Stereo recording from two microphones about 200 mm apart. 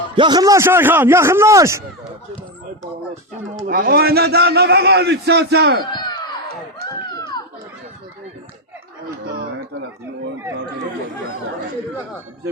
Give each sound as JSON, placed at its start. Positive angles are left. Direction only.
{"t": 0.2, "sound": "a man's voice", "side_deg": -20}
{"t": 3.7, "sound": "a man's voice", "side_deg": -50}
{"t": 5.9, "sound": "a sound", "side_deg": 20}
{"t": 7.2, "sound": "children playing", "side_deg": 20}
{"t": 9.0, "sound": "gargling", "side_deg": -50}